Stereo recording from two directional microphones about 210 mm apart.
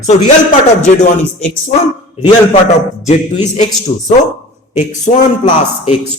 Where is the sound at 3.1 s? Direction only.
35° left (ahead or behind).